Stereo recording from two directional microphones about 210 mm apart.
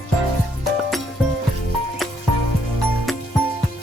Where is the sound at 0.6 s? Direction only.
Centre (ahead or behind).